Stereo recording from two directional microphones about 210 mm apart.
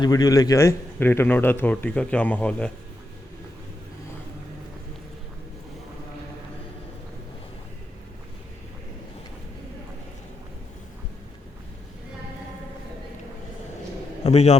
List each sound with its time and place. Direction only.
0.0 s a man's voice: 15° left (ahead or behind)
14.3 s a man's voice: 30° left (ahead or behind)